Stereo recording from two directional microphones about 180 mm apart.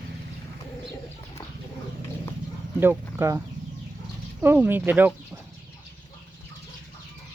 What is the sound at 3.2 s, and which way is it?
Speech, 15° right (ahead or behind).